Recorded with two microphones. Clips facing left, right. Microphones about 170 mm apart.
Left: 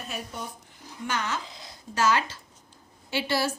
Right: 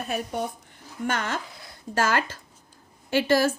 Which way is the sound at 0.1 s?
55° right (ahead or behind).